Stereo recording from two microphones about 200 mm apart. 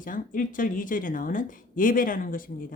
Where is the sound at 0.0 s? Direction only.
40° left (ahead or behind).